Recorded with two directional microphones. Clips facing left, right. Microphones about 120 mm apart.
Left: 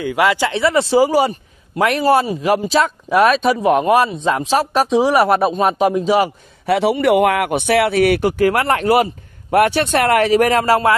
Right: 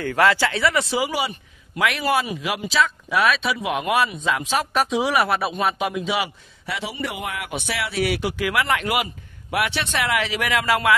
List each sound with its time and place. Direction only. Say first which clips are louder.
0.0 s speech: left 3 dB; 15° left (ahead or behind); by 6.3 s 40° left (ahead or behind)
6.6 s speech: left 14 dB; 65° left (ahead or behind); by 11.0 s 40° left (ahead or behind)